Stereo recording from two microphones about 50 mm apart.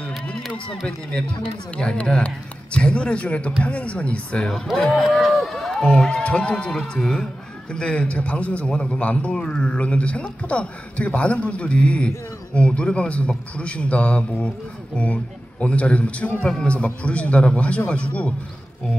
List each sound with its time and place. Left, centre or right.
1.8 s a man's voice: centre
4.7 s a sound: centre
6.0 s a man's voice: centre